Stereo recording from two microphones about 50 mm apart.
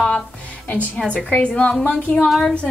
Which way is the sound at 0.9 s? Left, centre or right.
Left.